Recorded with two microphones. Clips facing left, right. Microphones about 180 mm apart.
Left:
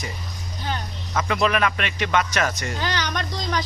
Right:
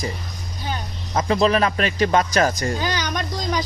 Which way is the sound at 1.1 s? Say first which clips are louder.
Right 4 dB; 30° right (ahead or behind).